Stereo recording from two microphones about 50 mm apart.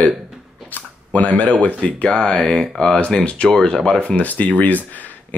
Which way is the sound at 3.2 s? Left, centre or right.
Left.